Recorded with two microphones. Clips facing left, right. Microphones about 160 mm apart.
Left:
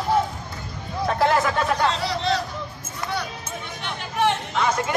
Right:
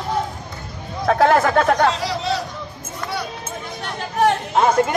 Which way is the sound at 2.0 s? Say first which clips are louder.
Right 1 dB; 10° right (ahead or behind).